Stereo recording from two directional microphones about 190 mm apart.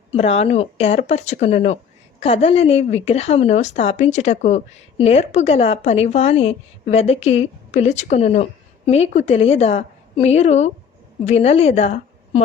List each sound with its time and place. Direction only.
0.1 s a woman's voice: 35° left (ahead or behind)